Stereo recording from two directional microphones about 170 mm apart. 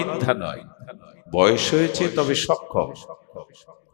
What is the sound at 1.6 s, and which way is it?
Speech, centre (ahead or behind).